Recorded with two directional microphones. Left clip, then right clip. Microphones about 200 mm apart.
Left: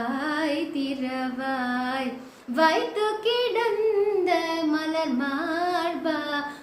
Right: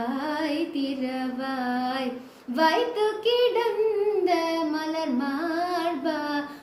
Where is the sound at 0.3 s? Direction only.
10° left (ahead or behind).